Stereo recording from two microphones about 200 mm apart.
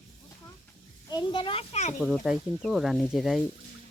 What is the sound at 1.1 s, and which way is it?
Speech, 25° left (ahead or behind).